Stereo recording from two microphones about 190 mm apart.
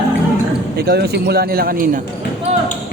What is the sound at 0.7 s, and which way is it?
A man's voice, 55° right (ahead or behind).